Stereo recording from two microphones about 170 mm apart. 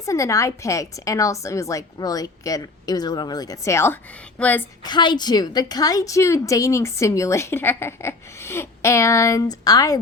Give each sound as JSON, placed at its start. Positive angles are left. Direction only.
{"t": 0.0, "sound": "a woman's voice", "side_deg": 20}
{"t": 4.8, "sound": "a woman's voice", "side_deg": 25}